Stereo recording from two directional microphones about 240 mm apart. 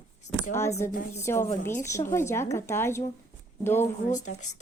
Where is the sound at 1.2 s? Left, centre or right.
Centre.